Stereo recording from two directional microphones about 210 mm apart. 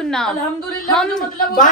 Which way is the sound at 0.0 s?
5° left (ahead or behind).